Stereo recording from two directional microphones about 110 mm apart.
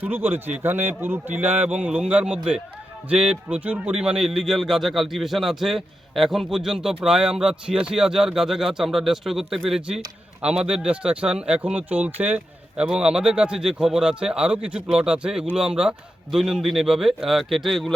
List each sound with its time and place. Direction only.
0.0 s a man's voice: 20° right (ahead or behind); by 17.9 s centre (ahead or behind)